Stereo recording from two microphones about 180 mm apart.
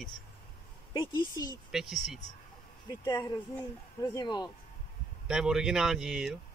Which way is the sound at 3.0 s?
20° left (ahead or behind).